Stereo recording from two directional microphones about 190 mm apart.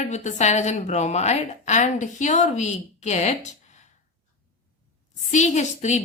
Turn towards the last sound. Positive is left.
turn(degrees=35)  # may be behind; listen again after turning